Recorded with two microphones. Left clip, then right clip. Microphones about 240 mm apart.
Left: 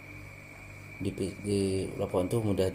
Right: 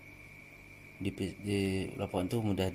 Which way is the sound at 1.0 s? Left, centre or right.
Right.